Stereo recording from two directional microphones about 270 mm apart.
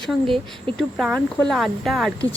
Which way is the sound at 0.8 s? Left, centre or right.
Centre.